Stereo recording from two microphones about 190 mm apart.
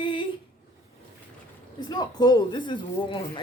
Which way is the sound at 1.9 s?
20° left (ahead or behind).